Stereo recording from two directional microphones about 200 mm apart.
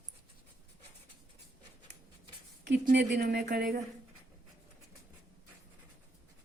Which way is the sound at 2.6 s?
60° right (ahead or behind).